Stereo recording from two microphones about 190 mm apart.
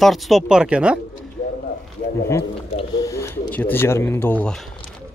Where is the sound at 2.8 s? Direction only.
20° left (ahead or behind).